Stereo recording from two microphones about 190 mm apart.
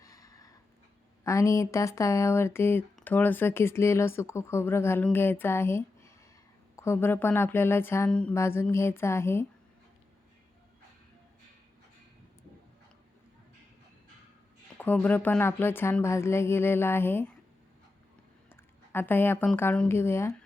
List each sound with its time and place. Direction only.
0.0 s a sound: 20° left (ahead or behind)
1.2 s speech: 15° left (ahead or behind)
14.8 s speech: 10° left (ahead or behind)
18.4 s a woman's voice: 10° left (ahead or behind)